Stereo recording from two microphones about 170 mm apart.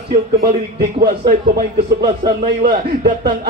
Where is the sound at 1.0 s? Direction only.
60° right (ahead or behind).